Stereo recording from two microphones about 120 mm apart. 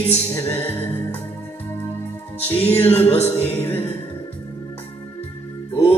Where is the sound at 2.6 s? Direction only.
20° left (ahead or behind).